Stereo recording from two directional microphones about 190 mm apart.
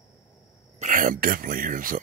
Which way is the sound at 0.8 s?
45° right (ahead or behind).